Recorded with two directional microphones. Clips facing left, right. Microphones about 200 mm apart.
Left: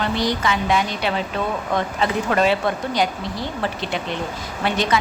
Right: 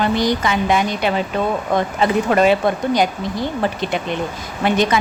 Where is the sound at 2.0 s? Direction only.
15° right (ahead or behind).